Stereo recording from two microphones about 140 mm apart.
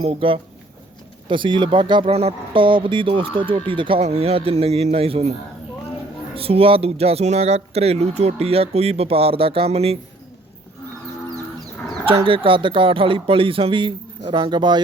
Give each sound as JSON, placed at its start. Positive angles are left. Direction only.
{"t": 0.0, "sound": "speech", "side_deg": -45}
{"t": 6.3, "sound": "speech", "side_deg": -45}
{"t": 12.0, "sound": "speech", "side_deg": -40}